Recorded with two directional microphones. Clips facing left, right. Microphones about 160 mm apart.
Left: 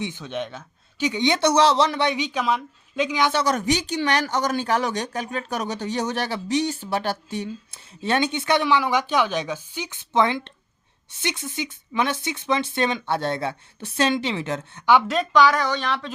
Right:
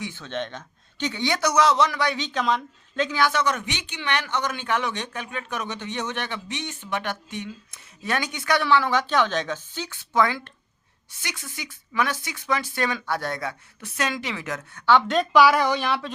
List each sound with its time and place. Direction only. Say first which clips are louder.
0.0 s speech: left 2 dB; 15° left (ahead or behind)
2.1 s speech: left 1 dB; 10° left (ahead or behind)
3.3 s speech: left 4 dB; 35° left (ahead or behind)
15.0 s speech: right 1 dB; centre (ahead or behind)